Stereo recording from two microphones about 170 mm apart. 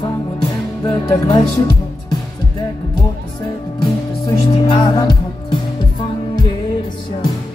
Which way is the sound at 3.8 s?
25° left (ahead or behind).